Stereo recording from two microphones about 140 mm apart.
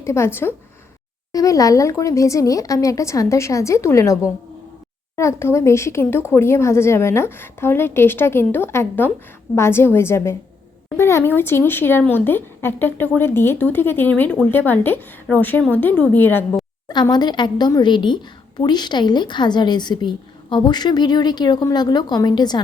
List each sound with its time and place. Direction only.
0.0 s speech: 20° left (ahead or behind)
16.9 s a woman's voice: 30° left (ahead or behind)